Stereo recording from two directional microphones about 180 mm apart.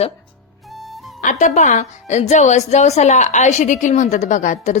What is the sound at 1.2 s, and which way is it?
Speech, 45° left (ahead or behind).